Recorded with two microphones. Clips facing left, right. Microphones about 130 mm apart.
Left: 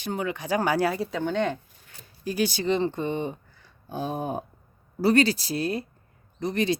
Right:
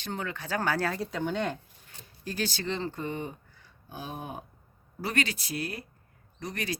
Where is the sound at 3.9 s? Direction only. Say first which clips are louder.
Left 9 dB; 35° left (ahead or behind).